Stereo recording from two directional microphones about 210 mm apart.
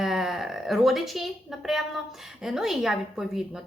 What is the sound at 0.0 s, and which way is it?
Music, centre (ahead or behind).